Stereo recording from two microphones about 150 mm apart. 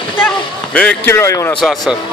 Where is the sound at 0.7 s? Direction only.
10° left (ahead or behind).